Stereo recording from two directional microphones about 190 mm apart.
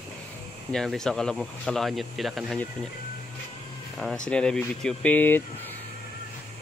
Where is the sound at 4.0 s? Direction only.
5° left (ahead or behind).